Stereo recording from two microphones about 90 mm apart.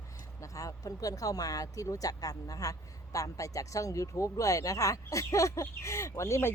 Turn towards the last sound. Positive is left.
turn(degrees=30)  # may be behind; listen again after turning